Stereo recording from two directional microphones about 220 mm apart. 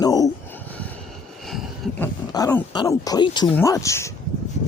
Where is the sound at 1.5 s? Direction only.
Centre (ahead or behind).